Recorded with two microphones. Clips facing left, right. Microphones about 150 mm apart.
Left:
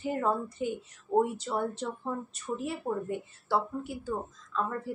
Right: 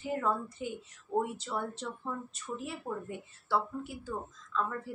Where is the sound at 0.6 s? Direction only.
50° left (ahead or behind).